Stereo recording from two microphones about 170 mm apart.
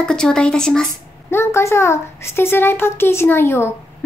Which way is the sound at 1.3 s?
15° left (ahead or behind).